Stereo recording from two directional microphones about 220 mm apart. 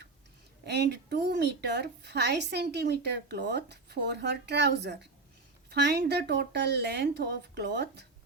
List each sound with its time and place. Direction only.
0.6 s a woman's voice: 50° right (ahead or behind)